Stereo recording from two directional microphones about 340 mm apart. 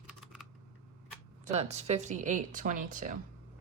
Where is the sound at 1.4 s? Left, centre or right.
Centre.